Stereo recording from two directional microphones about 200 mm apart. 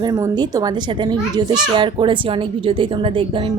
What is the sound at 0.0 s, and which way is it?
Speech, 20° right (ahead or behind).